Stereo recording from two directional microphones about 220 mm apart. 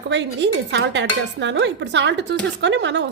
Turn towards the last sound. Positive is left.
turn(degrees=-55)  # may be behind; listen again after turning